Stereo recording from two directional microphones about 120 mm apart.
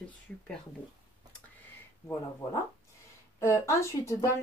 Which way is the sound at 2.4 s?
30° left (ahead or behind).